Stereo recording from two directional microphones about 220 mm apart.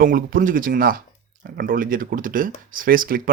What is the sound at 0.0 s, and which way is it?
Speech, 40° right (ahead or behind).